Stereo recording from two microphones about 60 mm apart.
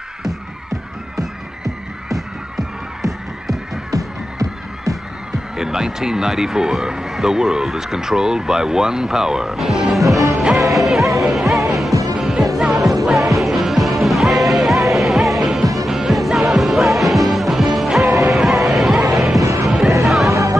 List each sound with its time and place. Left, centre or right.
1.1 s music: centre
3.9 s music: right
5.6 s speech: centre
10.3 s music: centre
11.9 s music: right
12.2 s music: centre
20.2 s music: right